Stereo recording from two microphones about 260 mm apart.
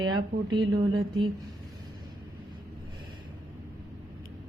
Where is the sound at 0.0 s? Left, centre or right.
Centre.